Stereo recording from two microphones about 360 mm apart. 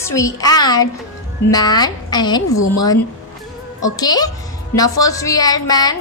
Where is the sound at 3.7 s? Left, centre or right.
Centre.